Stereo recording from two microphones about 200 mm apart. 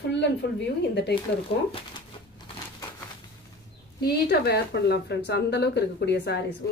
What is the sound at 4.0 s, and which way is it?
A woman's voice, 55° left (ahead or behind).